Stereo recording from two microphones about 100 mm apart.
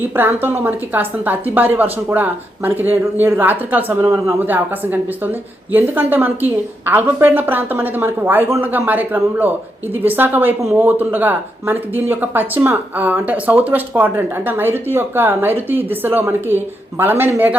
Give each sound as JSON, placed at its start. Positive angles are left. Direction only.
{"t": 0.2, "sound": "a woman's voice", "side_deg": -20}